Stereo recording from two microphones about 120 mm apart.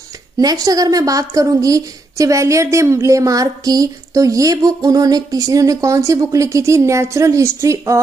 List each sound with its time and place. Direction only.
0.4 s a woman's voice: 30° right (ahead or behind)